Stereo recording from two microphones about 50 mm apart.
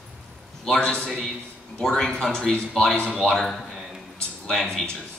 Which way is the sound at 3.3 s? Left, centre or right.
Centre.